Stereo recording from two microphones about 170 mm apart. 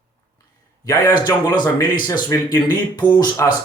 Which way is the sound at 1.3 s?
25° left (ahead or behind).